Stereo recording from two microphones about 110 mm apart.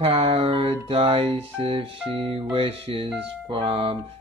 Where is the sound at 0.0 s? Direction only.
65° right (ahead or behind).